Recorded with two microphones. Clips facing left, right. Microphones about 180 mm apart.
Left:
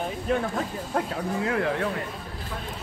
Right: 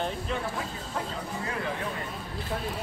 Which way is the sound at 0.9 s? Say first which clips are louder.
Left 7 dB; 65° left (ahead or behind).